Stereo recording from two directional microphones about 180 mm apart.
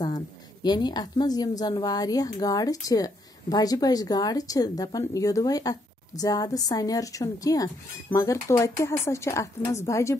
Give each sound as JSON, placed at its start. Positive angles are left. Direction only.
{"t": 0.0, "sound": "a woman's voice", "side_deg": 20}